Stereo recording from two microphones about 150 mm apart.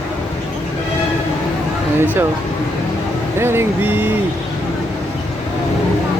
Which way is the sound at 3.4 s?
15° right (ahead or behind).